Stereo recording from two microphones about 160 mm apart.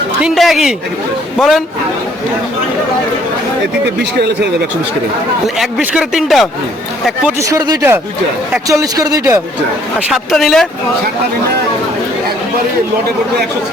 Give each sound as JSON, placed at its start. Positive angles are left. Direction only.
{"t": 0.2, "sound": "speech", "side_deg": 0}
{"t": 5.5, "sound": "speech", "side_deg": -5}
{"t": 7.3, "sound": "speech", "side_deg": -20}
{"t": 10.1, "sound": "speech", "side_deg": 0}